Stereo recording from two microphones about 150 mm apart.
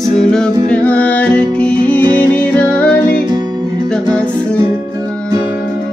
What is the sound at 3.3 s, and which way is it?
Music, 25° right (ahead or behind).